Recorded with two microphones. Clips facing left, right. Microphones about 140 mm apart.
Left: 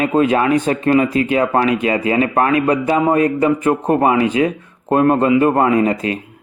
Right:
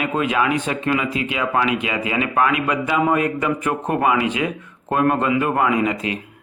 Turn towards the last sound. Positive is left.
turn(degrees=40)  # may be behind; listen again after turning